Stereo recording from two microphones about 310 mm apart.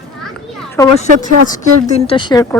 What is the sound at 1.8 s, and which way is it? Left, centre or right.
Speech, centre.